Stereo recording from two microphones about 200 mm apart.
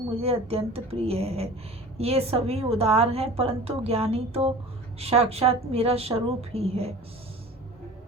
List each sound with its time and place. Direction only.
0.2 s a woman's voice: 30° right (ahead or behind)